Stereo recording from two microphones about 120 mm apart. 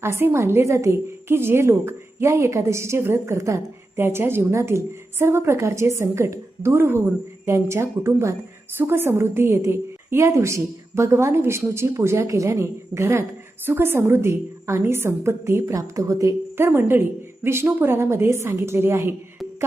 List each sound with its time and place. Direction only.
0.0 s a woman's voice: 20° right (ahead or behind)